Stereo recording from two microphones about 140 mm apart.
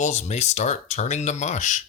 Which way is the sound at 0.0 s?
55° left (ahead or behind).